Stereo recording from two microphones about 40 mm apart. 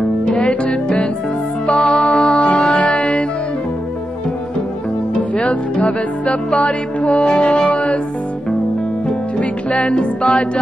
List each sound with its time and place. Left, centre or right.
0.0 s music: left
5.5 s music: left
7.7 s music: left
9.4 s music: left